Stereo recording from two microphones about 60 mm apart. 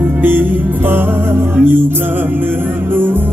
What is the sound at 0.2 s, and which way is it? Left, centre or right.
Music, right.